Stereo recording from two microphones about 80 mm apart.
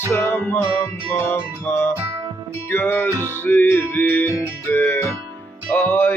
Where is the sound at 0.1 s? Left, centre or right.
Left.